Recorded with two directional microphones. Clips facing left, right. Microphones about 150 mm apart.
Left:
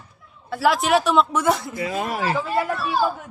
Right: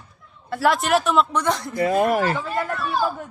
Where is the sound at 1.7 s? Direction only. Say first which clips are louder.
Right 7 dB; 50° right (ahead or behind).